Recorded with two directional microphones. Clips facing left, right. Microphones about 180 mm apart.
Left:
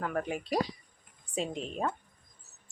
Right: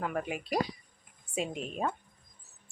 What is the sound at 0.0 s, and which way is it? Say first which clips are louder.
Speech: left 1 dB; 10° right (ahead or behind).